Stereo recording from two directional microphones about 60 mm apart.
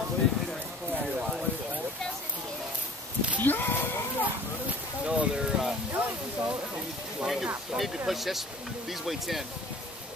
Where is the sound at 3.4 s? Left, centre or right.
Left.